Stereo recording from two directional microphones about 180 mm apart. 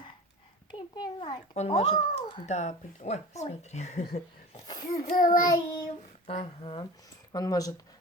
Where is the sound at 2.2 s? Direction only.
25° left (ahead or behind).